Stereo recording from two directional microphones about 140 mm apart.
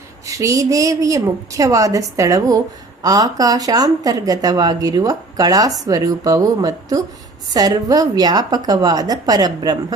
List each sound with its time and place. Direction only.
0.3 s speech: 25° right (ahead or behind)